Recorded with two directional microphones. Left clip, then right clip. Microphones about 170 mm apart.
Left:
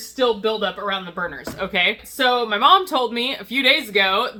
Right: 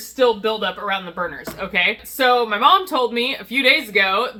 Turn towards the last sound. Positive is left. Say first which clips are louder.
# right 1 dB
turn(degrees=30)  # may be behind; listen again after turning